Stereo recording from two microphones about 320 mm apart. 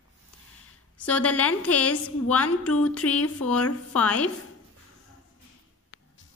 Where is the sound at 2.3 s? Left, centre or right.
Left.